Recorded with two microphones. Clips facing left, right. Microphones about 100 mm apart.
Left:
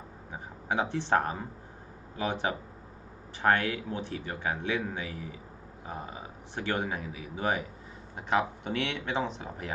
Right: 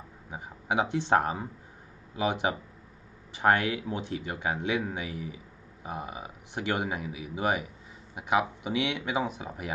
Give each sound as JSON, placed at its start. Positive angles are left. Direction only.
{"t": 0.3, "sound": "speech", "side_deg": -15}